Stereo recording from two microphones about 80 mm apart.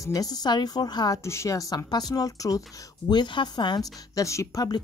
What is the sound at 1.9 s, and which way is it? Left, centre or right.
Speech, left.